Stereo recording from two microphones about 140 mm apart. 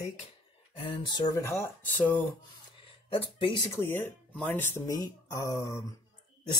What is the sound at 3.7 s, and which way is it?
Speech, 15° left (ahead or behind).